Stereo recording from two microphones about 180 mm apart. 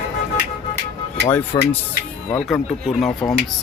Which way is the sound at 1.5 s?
25° left (ahead or behind).